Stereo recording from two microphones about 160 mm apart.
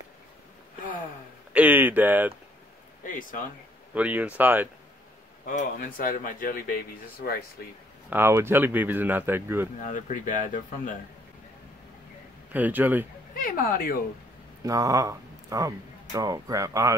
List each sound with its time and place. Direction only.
1.5 s a sound: 10° right (ahead or behind)
3.0 s speech: 55° left (ahead or behind)
3.9 s speech: 10° right (ahead or behind)
5.5 s speech: 60° left (ahead or behind)
8.1 s speech: 15° right (ahead or behind)
9.8 s speech: 55° left (ahead or behind)
12.5 s speech: 10° right (ahead or behind)
13.3 s speech: 65° left (ahead or behind)
14.6 s speech: 20° right (ahead or behind)